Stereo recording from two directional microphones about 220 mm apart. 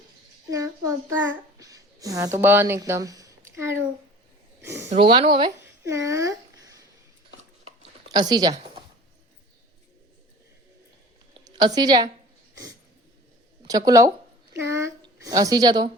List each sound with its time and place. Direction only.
0.5 s speech: 15° right (ahead or behind)
4.6 s a sound: 10° right (ahead or behind)
4.9 s speech: 20° right (ahead or behind)
8.1 s a woman's voice: 20° right (ahead or behind)
11.4 s a woman's voice: 15° right (ahead or behind)
13.7 s speech: 15° right (ahead or behind)